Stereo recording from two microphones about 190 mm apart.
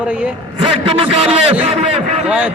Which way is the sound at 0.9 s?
30° right (ahead or behind).